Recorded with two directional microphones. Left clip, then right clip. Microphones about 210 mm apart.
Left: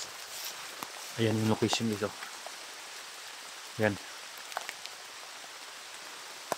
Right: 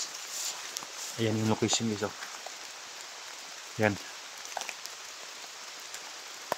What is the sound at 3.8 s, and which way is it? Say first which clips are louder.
Speech: right 2 dB; 10° right (ahead or behind).